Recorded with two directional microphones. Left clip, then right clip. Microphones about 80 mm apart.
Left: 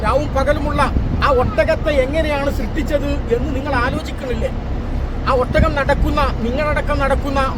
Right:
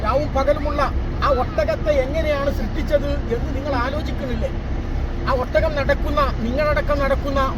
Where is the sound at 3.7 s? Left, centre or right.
Left.